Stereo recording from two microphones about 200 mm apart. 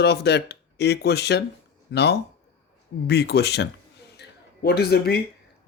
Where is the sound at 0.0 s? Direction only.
55° left (ahead or behind).